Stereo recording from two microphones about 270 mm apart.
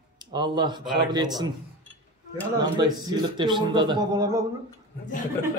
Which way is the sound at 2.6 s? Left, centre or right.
Centre.